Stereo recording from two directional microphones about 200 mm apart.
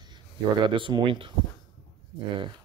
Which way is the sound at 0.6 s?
25° right (ahead or behind).